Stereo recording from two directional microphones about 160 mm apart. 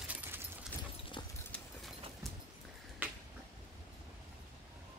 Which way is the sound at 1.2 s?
25° left (ahead or behind).